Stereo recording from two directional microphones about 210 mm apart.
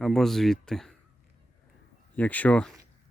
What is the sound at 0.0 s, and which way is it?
Speech, centre (ahead or behind).